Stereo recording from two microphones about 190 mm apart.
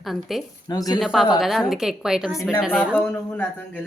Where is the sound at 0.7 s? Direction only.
20° left (ahead or behind).